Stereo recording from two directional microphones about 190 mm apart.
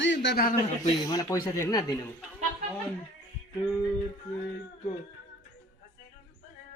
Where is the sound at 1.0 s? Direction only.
20° left (ahead or behind).